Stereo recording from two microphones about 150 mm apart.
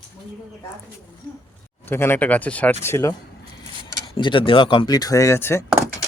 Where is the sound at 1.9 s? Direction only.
15° left (ahead or behind).